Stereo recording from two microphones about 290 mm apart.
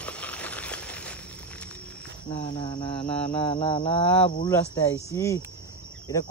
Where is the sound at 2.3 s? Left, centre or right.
Left.